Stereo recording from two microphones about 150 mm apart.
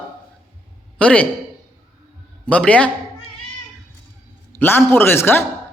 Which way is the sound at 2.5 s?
10° left (ahead or behind).